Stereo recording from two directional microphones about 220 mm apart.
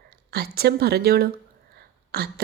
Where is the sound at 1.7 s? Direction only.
45° right (ahead or behind).